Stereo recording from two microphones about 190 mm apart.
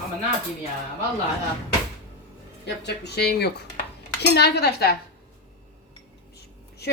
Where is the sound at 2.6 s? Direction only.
65° left (ahead or behind).